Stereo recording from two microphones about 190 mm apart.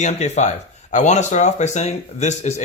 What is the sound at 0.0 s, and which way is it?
Speech, 35° left (ahead or behind).